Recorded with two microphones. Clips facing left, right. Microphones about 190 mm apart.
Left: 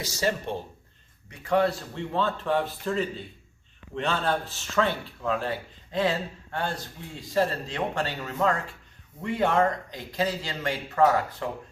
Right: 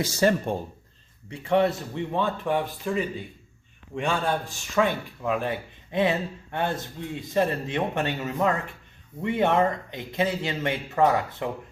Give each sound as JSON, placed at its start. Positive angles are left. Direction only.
{"t": 0.0, "sound": "speech", "side_deg": -55}
{"t": 1.3, "sound": "speech", "side_deg": -25}